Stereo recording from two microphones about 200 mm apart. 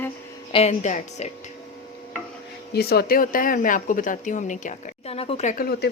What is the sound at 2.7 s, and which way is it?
Speech, 50° left (ahead or behind).